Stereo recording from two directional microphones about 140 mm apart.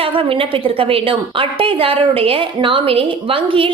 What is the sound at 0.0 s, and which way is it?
A woman's voice, 40° right (ahead or behind).